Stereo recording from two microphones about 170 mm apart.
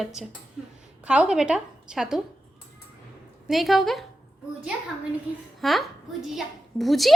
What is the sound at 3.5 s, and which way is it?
Speech, centre (ahead or behind).